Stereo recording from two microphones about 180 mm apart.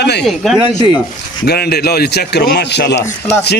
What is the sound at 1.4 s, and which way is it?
A man's voice, 65° left (ahead or behind).